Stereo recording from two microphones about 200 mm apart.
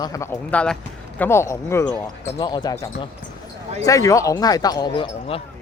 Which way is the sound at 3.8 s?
15° left (ahead or behind).